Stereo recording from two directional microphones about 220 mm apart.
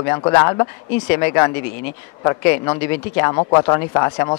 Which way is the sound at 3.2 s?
20° left (ahead or behind).